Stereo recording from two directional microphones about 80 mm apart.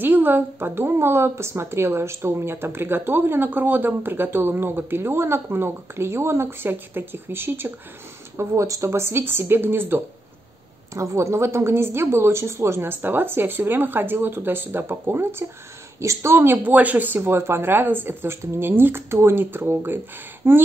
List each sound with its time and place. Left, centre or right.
0.0 s a woman's voice: right
8.4 s a woman's voice: right